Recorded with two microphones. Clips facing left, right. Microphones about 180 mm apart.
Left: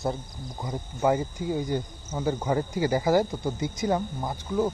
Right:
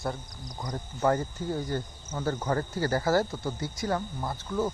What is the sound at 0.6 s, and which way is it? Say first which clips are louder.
Speech: left 2 dB; 10° left (ahead or behind).